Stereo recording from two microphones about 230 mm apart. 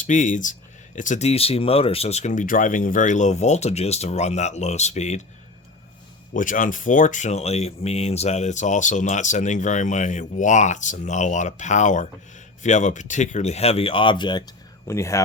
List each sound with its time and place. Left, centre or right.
0.0 s speech: left
6.3 s speech: left; by 15.2 s centre